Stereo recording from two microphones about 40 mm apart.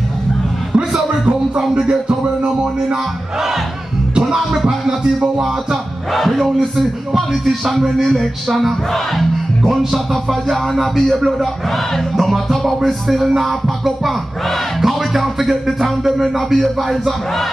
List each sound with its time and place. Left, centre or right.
0.7 s music: right
4.3 s music: centre
4.6 s music: centre
6.1 s music: centre
10.5 s music: centre